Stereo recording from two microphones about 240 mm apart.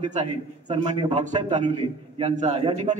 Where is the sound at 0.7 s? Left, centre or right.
Right.